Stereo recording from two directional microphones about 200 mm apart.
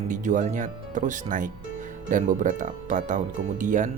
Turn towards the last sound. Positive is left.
turn(degrees=-40)  # may be behind; listen again after turning